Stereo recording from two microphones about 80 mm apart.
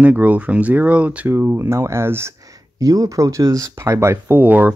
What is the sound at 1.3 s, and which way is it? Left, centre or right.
Speech, right.